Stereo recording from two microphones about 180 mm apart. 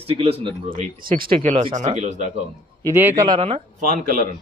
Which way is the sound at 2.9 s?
15° right (ahead or behind).